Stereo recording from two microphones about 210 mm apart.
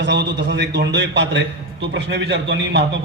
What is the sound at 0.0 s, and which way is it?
A man's voice, 55° right (ahead or behind).